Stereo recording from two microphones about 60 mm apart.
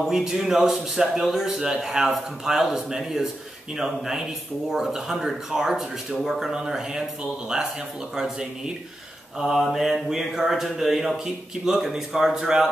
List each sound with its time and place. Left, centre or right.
0.0 s a man's voice: centre